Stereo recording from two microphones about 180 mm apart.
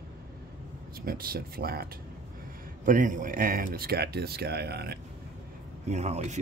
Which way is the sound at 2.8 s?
45° right (ahead or behind).